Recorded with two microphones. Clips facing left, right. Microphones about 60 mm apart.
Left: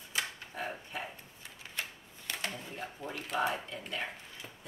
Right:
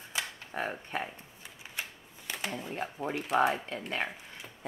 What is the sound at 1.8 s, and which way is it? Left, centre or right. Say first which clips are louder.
Typewriter: right 1 dB; centre.